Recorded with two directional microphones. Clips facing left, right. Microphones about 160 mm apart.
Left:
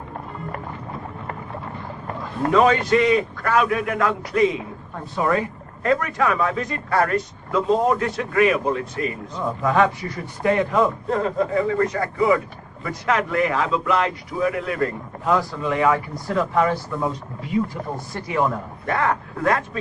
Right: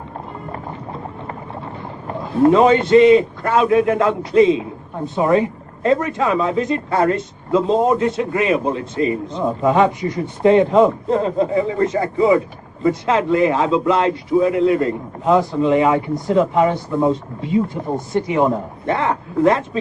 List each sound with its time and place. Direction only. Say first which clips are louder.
2.5 s speech: right 4 dB; 25° right (ahead or behind)